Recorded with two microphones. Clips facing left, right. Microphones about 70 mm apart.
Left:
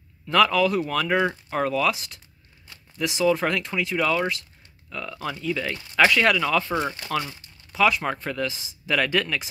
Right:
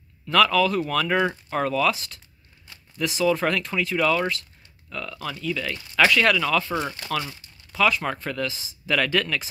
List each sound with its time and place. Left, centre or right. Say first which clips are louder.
0.3 s speech: even; centre
3.0 s speech: even; centre